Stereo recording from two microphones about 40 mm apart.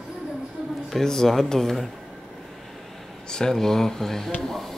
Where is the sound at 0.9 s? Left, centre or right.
Centre.